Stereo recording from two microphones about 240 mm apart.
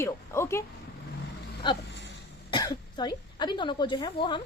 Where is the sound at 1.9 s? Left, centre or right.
Left.